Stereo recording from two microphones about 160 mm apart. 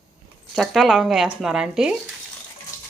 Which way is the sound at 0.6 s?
Centre (ahead or behind).